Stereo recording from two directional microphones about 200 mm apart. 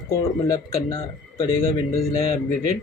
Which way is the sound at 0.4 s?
20° left (ahead or behind).